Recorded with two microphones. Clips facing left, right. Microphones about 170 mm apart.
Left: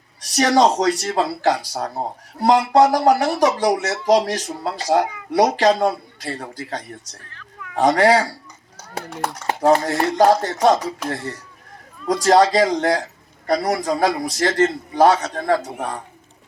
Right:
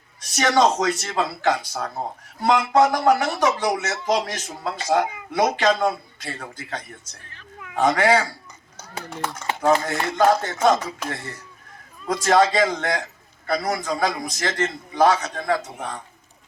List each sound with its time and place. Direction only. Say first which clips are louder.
0.3 s speech: left 3 dB; 35° left (ahead or behind)
7.3 s roaring cats: right 2 dB; 20° right (ahead or behind)
7.8 s speech: left 3 dB; 35° left (ahead or behind)
12.2 s speech: left 3 dB; 35° left (ahead or behind)